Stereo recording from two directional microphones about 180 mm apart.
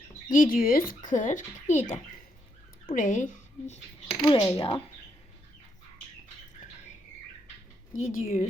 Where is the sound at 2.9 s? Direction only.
45° left (ahead or behind).